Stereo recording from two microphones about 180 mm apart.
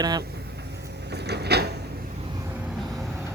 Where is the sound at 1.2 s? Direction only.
65° right (ahead or behind).